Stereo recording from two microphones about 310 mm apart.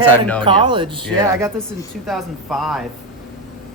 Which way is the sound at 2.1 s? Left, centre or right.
Centre.